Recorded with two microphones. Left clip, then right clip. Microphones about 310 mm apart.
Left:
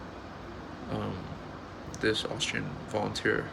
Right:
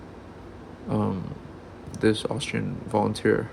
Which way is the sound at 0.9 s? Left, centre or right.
Centre.